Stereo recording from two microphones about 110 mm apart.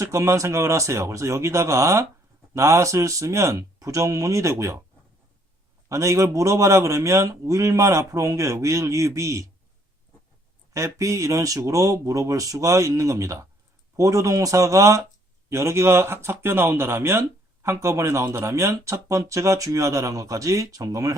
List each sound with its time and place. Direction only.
0.0 s speech: 25° right (ahead or behind)
5.9 s speech: 30° right (ahead or behind)
10.8 s speech: 30° right (ahead or behind)